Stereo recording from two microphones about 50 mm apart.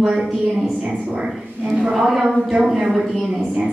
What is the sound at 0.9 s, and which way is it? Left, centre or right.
Speech, right.